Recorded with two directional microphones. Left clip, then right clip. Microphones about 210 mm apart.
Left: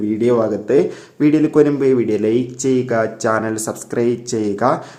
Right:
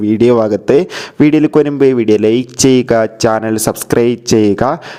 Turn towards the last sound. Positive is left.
turn(degrees=-40)  # may be behind; listen again after turning